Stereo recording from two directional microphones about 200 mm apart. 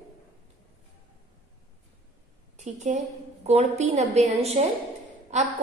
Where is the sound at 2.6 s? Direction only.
35° right (ahead or behind).